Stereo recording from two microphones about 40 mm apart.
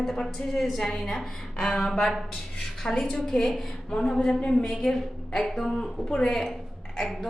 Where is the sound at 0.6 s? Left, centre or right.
Centre.